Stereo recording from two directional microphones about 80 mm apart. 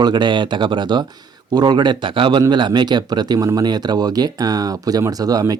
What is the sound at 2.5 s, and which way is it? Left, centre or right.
Speech, right.